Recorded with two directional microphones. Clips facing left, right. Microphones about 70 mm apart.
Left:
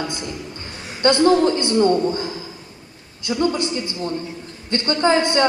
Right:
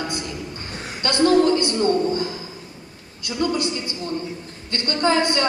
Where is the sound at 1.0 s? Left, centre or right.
Left.